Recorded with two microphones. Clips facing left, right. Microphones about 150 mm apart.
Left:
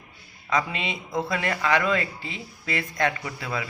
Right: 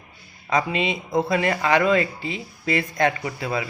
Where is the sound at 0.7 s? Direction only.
15° right (ahead or behind).